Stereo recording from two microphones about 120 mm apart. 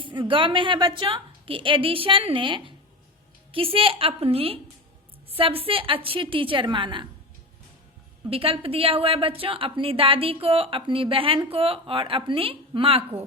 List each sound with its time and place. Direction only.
0.0 s a woman's voice: 45° right (ahead or behind)
8.3 s a woman's voice: 50° right (ahead or behind)
13.0 s a woman's voice: 15° right (ahead or behind)